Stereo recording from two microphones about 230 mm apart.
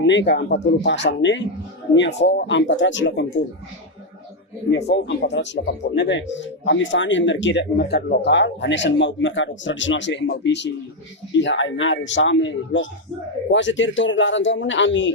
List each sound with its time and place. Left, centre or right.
0.0 s speech: left
4.9 s speech: left